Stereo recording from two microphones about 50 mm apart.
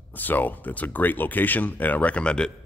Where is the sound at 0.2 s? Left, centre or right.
Left; by 2.5 s centre.